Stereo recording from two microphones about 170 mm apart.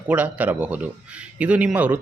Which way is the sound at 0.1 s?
10° right (ahead or behind).